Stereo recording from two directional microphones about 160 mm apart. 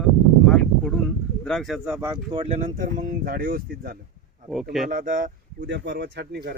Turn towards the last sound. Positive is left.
turn(degrees=-90)